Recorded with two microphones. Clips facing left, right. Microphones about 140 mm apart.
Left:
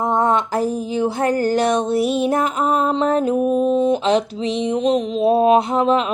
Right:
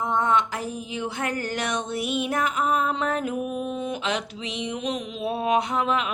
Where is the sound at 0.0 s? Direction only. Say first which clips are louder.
Left 5 dB; 40° left (ahead or behind).